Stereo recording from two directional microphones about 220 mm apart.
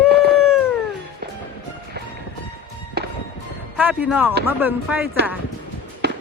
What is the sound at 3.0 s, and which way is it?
Music, 45° right (ahead or behind).